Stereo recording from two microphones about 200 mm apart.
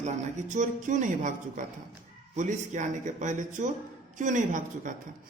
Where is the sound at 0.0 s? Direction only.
35° right (ahead or behind).